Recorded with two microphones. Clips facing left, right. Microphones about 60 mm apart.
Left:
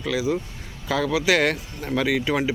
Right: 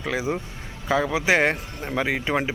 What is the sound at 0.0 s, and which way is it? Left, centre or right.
Speech, right.